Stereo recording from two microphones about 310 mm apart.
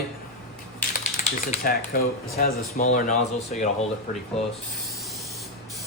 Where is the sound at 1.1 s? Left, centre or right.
Left.